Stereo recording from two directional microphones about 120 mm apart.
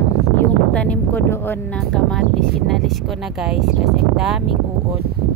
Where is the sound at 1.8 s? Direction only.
5° left (ahead or behind).